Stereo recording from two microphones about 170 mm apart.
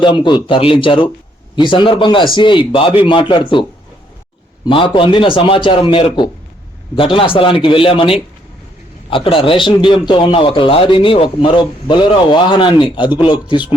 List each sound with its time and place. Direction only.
0.0 s a man's voice: 30° left (ahead or behind)